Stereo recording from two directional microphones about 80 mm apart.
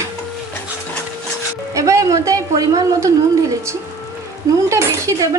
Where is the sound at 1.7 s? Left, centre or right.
Right.